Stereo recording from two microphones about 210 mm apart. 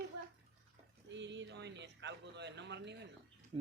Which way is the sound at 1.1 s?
55° right (ahead or behind).